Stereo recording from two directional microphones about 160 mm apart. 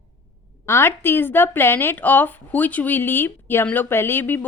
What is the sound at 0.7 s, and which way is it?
A woman's voice, 15° left (ahead or behind).